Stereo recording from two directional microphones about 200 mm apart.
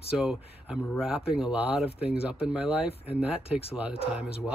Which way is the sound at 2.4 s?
5° right (ahead or behind).